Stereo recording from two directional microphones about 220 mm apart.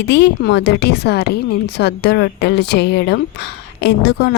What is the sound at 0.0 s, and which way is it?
Speech, 50° left (ahead or behind).